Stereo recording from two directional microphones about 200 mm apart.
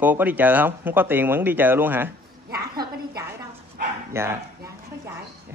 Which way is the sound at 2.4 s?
50° right (ahead or behind).